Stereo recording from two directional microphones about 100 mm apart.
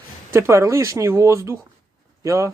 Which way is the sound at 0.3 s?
30° right (ahead or behind).